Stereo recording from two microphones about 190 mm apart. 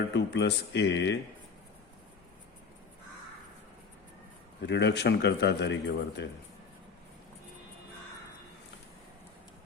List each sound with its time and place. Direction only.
0.1 s a man's voice: 65° left (ahead or behind)
4.6 s a man's voice: 65° left (ahead or behind)